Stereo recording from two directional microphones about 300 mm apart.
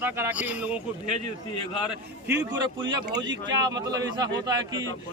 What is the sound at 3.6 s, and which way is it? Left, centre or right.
Speech, centre.